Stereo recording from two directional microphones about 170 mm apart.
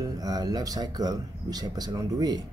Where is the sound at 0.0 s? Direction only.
20° right (ahead or behind).